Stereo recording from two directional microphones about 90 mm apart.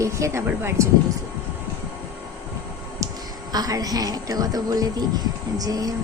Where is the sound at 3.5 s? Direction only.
45° right (ahead or behind).